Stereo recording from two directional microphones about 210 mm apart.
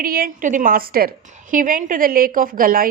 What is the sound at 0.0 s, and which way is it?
A woman's voice, 45° right (ahead or behind).